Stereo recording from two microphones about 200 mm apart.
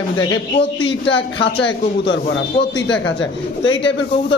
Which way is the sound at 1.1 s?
65° left (ahead or behind).